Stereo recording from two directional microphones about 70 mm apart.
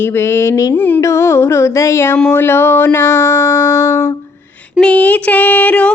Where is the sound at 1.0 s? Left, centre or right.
Left.